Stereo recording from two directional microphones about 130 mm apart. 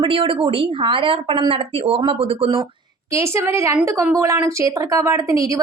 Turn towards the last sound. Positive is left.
turn(degrees=-25)  # may be behind; listen again after turning